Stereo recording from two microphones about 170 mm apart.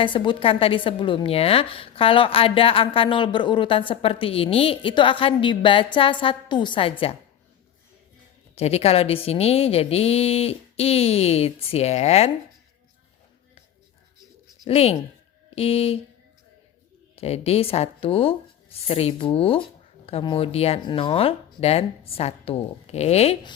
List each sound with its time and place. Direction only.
0.0 s a woman's voice: 30° left (ahead or behind)
8.5 s a woman's voice: 35° left (ahead or behind)
14.6 s speech: 35° left (ahead or behind)
17.2 s a woman's voice: 35° left (ahead or behind)